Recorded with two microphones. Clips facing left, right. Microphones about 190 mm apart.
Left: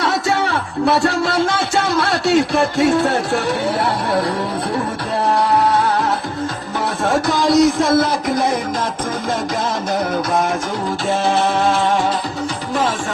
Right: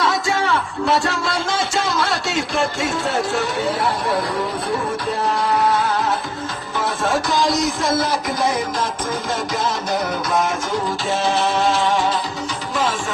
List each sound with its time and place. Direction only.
0.0 s a sound: 65° left (ahead or behind)
0.9 s speech: 65° left (ahead or behind)
7.5 s speech: 55° left (ahead or behind)